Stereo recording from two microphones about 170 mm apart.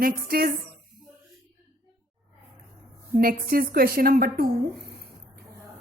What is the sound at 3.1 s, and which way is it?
A woman's voice, 60° right (ahead or behind).